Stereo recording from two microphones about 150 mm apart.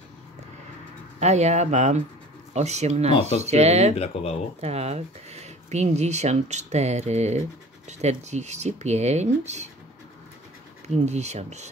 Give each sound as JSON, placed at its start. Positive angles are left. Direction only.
{"t": 1.2, "sound": "speech", "side_deg": -45}
{"t": 3.9, "sound": "speech", "side_deg": 45}
{"t": 4.6, "sound": "speech", "side_deg": -45}
{"t": 11.1, "sound": "speech", "side_deg": -50}